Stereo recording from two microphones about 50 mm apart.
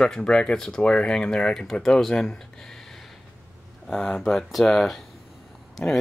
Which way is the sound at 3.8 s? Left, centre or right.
Centre.